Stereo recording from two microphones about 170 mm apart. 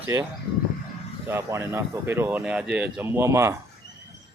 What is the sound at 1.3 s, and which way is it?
Speech, 15° right (ahead or behind).